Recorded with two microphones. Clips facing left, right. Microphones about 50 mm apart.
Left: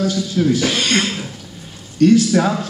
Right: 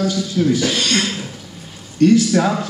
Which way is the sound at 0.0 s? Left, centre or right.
Centre.